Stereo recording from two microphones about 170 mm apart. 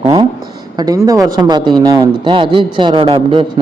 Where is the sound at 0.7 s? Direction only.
20° right (ahead or behind).